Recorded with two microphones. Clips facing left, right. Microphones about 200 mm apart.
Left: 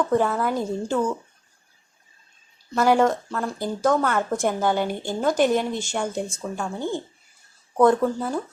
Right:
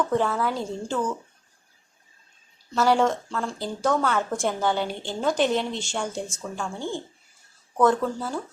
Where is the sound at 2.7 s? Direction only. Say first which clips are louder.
Left 2 dB; 10° left (ahead or behind).